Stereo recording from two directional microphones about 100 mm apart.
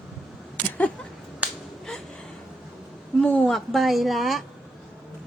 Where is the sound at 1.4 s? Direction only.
15° right (ahead or behind).